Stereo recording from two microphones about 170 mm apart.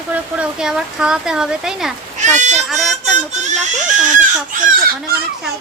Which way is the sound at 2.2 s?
45° right (ahead or behind).